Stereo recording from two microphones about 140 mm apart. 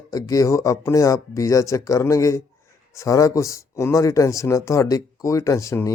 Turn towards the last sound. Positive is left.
turn(degrees=20)  # may be behind; listen again after turning